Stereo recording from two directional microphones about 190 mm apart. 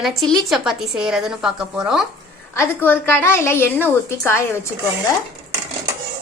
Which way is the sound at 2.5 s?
10° left (ahead or behind).